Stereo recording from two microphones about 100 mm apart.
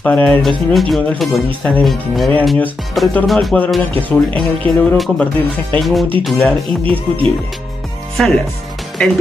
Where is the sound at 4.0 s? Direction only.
15° left (ahead or behind).